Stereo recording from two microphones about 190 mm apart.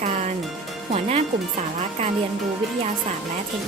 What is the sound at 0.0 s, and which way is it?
Music, 40° right (ahead or behind).